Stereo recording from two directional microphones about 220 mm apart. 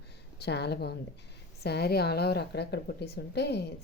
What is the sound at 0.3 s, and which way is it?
A woman's voice, 50° left (ahead or behind).